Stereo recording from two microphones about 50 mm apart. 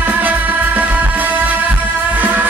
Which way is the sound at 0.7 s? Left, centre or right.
Right.